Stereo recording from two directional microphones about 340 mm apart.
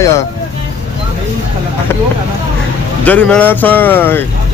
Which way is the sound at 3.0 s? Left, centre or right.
Centre.